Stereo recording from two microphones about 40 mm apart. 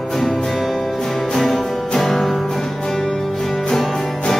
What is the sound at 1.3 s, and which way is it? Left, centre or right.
Music, centre.